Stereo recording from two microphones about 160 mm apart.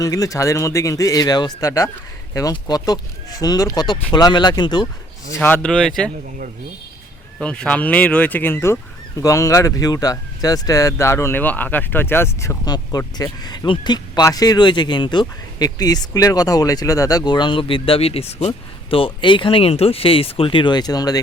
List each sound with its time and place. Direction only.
0.0 s speech: 20° left (ahead or behind)
5.3 s speech: 10° left (ahead or behind)
7.3 s speech: 5° left (ahead or behind); by 21.2 s 25° left (ahead or behind)